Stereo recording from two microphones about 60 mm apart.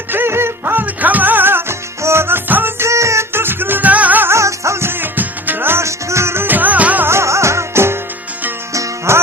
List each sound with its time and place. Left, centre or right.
0.1 s music: right
2.8 s music: right
3.3 s music: right
4.3 s music: right
5.8 s music: right
7.1 s music: right
8.7 s music: right